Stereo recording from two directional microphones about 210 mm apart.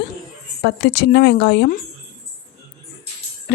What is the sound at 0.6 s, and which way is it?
A woman's voice, 50° left (ahead or behind).